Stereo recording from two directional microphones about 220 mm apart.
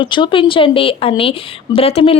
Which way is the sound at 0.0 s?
20° left (ahead or behind).